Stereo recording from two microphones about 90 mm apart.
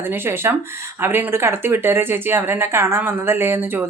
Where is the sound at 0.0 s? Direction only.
25° right (ahead or behind).